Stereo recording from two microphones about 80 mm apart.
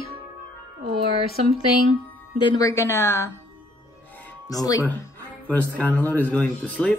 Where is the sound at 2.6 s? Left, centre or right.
Left.